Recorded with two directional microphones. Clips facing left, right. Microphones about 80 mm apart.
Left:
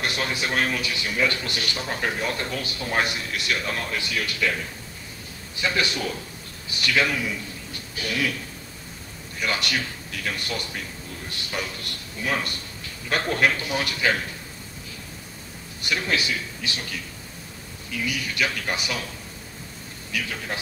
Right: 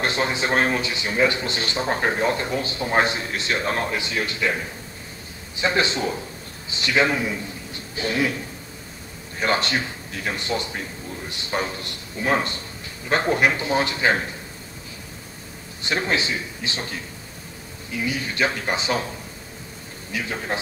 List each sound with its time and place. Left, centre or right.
0.0 s a man's voice: right
15.8 s a man's voice: right